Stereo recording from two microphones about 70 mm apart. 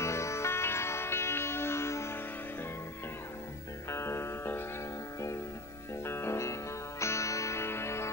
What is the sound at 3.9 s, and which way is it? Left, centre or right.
Music, left.